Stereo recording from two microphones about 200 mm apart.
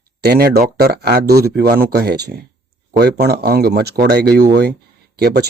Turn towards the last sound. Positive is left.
turn(degrees=-55)  # may be behind; listen again after turning